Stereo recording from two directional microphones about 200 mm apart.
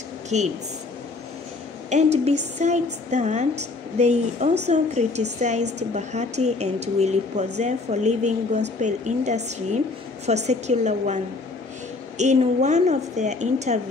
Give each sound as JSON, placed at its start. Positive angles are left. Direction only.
{"t": 0.3, "sound": "speech", "side_deg": -35}
{"t": 1.9, "sound": "speech", "side_deg": -35}
{"t": 12.2, "sound": "speech", "side_deg": -35}